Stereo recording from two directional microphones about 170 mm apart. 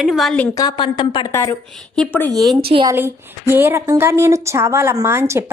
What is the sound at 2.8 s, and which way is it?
A woman's voice, 15° right (ahead or behind).